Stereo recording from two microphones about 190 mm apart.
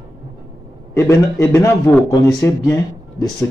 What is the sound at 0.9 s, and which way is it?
A man's voice, 15° left (ahead or behind).